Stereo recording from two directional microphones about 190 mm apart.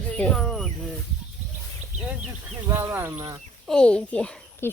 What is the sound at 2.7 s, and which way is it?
Speech, 10° right (ahead or behind).